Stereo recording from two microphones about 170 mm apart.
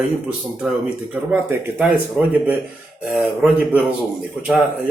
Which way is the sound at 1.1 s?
10° right (ahead or behind).